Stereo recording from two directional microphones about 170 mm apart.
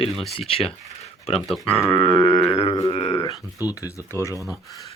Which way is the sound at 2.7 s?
20° left (ahead or behind).